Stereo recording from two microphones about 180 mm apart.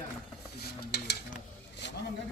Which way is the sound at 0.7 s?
65° left (ahead or behind).